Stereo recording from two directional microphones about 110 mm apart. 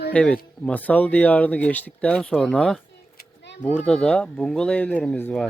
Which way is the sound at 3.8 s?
5° left (ahead or behind).